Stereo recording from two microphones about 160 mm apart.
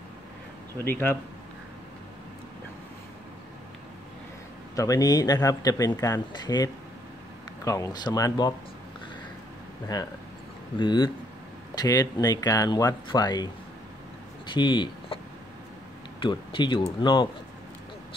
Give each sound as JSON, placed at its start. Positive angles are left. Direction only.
{"t": 0.8, "sound": "speech", "side_deg": 15}
{"t": 4.7, "sound": "speech", "side_deg": 20}
{"t": 10.8, "sound": "speech", "side_deg": 30}
{"t": 16.2, "sound": "speech", "side_deg": 30}